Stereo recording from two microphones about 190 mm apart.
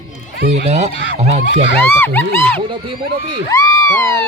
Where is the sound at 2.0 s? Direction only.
10° left (ahead or behind).